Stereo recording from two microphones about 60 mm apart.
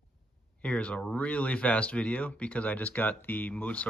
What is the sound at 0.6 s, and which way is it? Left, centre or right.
Speech, left.